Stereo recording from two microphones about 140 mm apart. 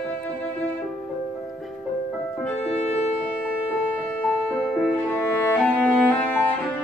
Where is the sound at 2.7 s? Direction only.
50° left (ahead or behind).